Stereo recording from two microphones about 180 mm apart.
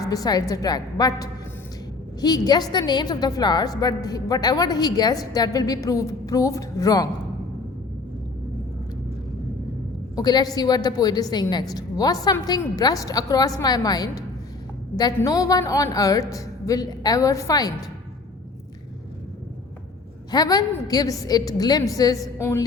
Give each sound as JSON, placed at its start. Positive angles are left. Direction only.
{"t": 0.0, "sound": "a woman's voice", "side_deg": 20}
{"t": 10.2, "sound": "a woman's voice", "side_deg": 20}
{"t": 20.3, "sound": "a woman's voice", "side_deg": 20}